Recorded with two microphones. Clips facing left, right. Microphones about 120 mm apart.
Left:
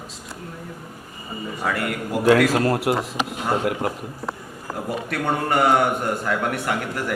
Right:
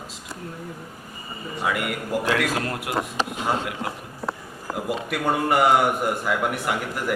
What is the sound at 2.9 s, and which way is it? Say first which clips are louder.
Speech: left 5 dB; 35° left (ahead or behind).